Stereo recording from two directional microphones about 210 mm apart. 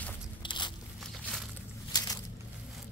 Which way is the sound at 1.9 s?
15° left (ahead or behind).